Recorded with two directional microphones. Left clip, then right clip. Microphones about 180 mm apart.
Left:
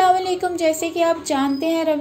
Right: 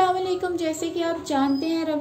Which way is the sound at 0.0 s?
15° left (ahead or behind).